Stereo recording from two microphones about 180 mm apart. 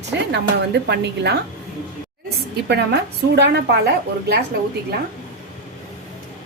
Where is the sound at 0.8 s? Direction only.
70° right (ahead or behind).